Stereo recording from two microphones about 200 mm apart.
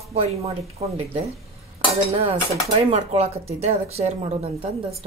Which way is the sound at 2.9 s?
30° right (ahead or behind).